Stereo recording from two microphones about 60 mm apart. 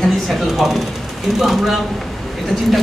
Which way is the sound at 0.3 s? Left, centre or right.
Centre.